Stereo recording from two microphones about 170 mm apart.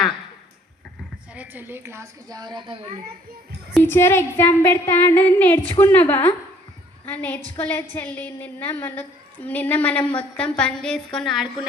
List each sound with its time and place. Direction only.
1.3 s a woman's voice: 10° right (ahead or behind); by 2.9 s 30° right (ahead or behind)
3.8 s a woman's voice: 15° left (ahead or behind)